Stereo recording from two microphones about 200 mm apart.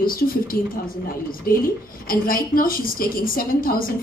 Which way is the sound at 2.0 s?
45° left (ahead or behind).